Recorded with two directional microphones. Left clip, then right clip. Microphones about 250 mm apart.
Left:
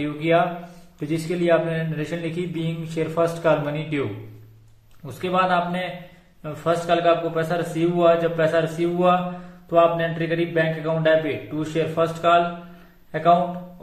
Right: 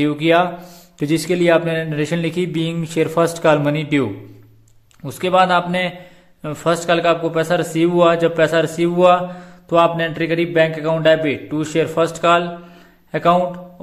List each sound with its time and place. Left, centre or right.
0.0 s a man's voice: right
5.0 s a man's voice: right